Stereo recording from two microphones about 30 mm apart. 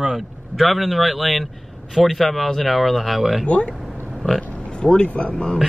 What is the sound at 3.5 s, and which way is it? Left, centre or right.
Speech, left.